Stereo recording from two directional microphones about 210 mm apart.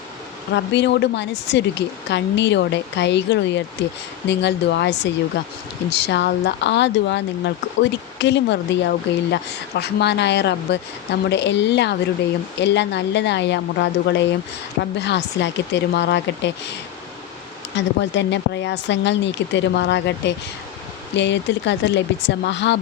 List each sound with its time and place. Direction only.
0.5 s speech: 55° left (ahead or behind)
17.7 s speech: 55° left (ahead or behind)